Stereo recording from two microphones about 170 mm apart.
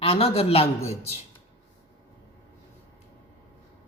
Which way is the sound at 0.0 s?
35° left (ahead or behind).